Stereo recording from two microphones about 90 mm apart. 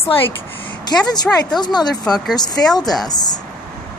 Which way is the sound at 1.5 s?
50° left (ahead or behind).